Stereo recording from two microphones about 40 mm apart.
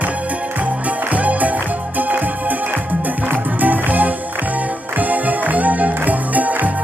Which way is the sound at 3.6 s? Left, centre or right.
Right.